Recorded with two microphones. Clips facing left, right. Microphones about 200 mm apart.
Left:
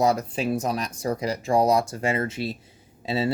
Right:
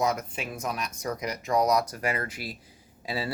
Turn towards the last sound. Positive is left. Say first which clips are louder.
# left 7 dB
turn(degrees=25)  # may be behind; listen again after turning